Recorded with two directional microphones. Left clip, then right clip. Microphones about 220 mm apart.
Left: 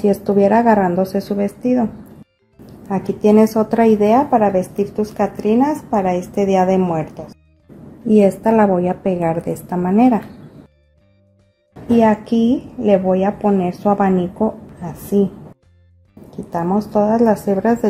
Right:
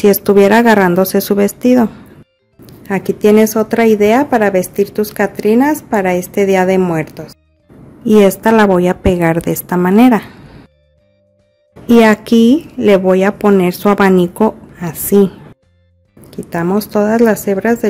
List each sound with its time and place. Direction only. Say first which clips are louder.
0.0 s a woman's voice: right 6 dB; 35° right (ahead or behind)
11.9 s a woman's voice: right 6 dB; 40° right (ahead or behind)
16.3 s a woman's voice: right 3 dB; 30° right (ahead or behind)